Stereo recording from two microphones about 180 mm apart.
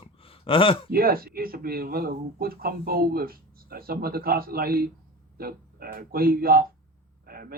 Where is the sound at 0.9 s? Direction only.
55° right (ahead or behind).